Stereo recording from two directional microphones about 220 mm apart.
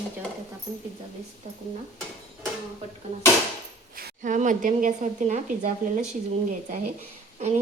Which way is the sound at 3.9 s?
40° right (ahead or behind).